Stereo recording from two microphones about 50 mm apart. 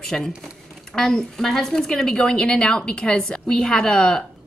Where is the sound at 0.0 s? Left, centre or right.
Centre.